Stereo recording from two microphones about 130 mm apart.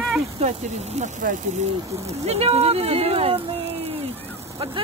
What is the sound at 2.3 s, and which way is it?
Speech, 50° right (ahead or behind).